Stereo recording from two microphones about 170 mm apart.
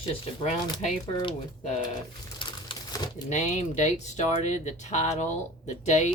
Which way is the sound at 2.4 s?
30° left (ahead or behind).